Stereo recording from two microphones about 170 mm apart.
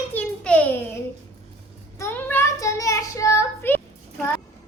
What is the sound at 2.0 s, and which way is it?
Child singing, 10° left (ahead or behind).